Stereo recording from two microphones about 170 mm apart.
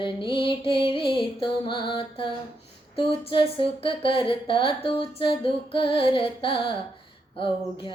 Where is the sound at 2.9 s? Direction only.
30° left (ahead or behind).